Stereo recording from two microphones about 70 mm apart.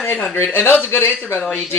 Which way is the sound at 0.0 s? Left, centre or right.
Left.